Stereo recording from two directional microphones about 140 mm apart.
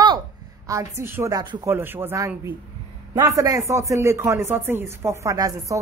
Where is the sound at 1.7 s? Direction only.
15° right (ahead or behind).